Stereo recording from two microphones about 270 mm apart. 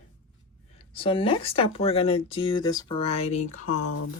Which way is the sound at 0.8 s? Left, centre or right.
Centre.